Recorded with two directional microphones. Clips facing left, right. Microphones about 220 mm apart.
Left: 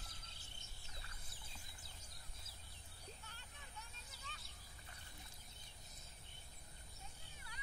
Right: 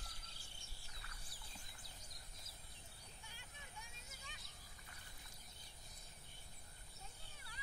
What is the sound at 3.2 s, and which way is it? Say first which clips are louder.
Vehicle: even; 10° right (ahead or behind).